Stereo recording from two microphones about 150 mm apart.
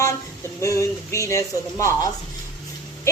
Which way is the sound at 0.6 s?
20° left (ahead or behind).